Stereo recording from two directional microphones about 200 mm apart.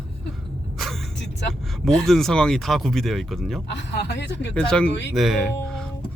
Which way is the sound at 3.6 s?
60° left (ahead or behind).